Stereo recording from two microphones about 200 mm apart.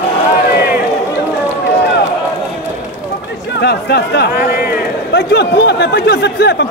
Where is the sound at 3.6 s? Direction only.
55° left (ahead or behind).